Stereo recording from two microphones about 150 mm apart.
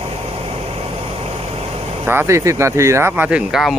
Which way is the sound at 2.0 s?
15° right (ahead or behind).